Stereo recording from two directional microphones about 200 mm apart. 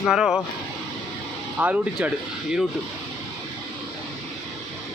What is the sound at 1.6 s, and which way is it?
Speech, 5° right (ahead or behind).